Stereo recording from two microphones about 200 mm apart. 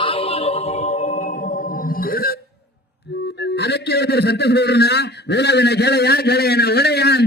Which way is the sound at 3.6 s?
55° left (ahead or behind).